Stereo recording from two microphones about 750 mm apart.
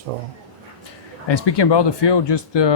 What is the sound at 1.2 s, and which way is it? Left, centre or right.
Speech, left.